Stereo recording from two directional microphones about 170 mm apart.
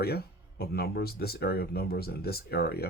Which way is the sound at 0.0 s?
70° left (ahead or behind).